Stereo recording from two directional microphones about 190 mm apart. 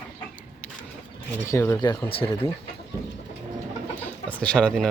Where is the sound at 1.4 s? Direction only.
15° left (ahead or behind).